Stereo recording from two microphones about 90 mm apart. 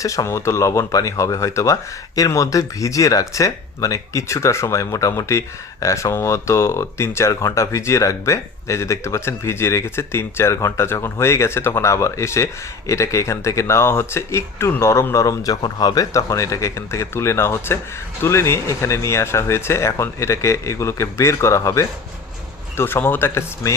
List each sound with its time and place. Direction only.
0.0 s speech: 40° left (ahead or behind)
22.8 s speech: 25° left (ahead or behind)